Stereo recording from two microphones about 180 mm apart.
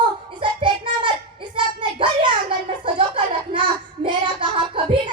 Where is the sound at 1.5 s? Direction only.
25° right (ahead or behind).